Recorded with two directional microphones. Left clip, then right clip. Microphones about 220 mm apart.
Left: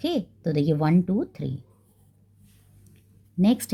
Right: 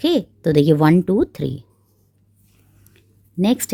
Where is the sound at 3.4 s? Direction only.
35° right (ahead or behind).